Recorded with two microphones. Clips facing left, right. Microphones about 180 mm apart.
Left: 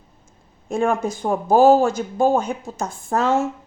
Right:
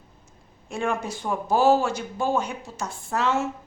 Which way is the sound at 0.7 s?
45° left (ahead or behind).